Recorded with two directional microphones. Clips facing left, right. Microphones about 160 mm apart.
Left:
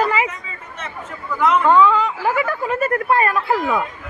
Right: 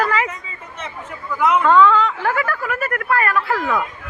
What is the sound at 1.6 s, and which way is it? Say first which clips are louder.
Speech: right 1 dB; 10° left (ahead or behind).